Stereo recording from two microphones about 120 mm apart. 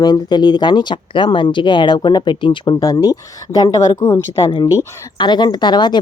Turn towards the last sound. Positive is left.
turn(degrees=40)  # may be behind; listen again after turning